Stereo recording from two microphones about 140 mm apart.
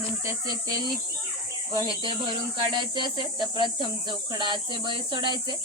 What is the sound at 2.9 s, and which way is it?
Speech, 35° right (ahead or behind).